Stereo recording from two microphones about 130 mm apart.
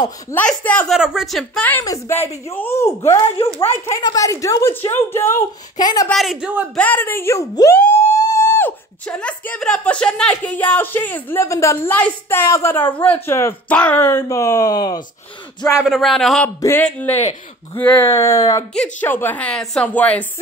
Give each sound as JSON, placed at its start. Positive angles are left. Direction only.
{"t": 0.3, "sound": "speech", "side_deg": 10}
{"t": 0.9, "sound": "speech", "side_deg": -5}
{"t": 1.8, "sound": "speech", "side_deg": 25}
{"t": 2.1, "sound": "speech", "side_deg": 15}
{"t": 3.5, "sound": "speech", "side_deg": 45}
{"t": 3.9, "sound": "speech", "side_deg": 25}
{"t": 6.0, "sound": "speech", "side_deg": 0}
{"t": 6.8, "sound": "speech", "side_deg": 15}
{"t": 15.8, "sound": "speech", "side_deg": 0}
{"t": 16.4, "sound": "speech", "side_deg": 15}
{"t": 18.8, "sound": "speech", "side_deg": 15}